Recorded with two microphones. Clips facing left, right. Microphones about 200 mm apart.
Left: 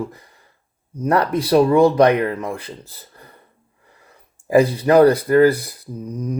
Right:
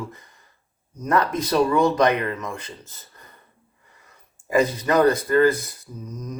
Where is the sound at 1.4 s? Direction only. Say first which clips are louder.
Left 8 dB; 30° left (ahead or behind).